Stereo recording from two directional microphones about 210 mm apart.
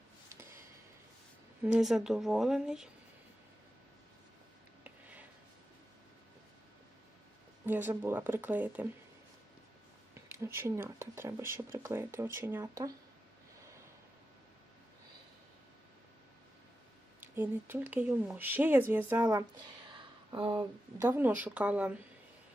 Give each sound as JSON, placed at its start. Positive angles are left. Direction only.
{"t": 1.6, "sound": "speech", "side_deg": -5}
{"t": 4.8, "sound": "a sound", "side_deg": -5}
{"t": 7.6, "sound": "speech", "side_deg": -10}
{"t": 10.2, "sound": "speech", "side_deg": -10}
{"t": 17.2, "sound": "speech", "side_deg": -10}
{"t": 21.0, "sound": "speech", "side_deg": -10}